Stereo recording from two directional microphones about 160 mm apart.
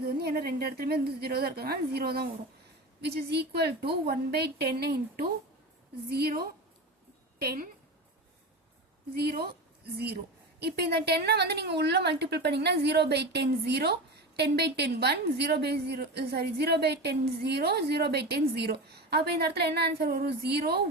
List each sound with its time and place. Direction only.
0.2 s a woman's voice: 75° right (ahead or behind)
3.0 s a woman's voice: 90° right; by 7.7 s 70° right (ahead or behind)
9.1 s a woman's voice: 75° right (ahead or behind)
10.6 s a woman's voice: 85° right